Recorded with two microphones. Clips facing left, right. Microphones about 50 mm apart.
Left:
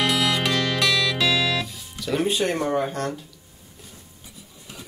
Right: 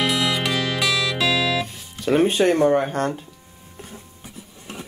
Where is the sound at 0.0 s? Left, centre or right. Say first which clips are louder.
Even; centre.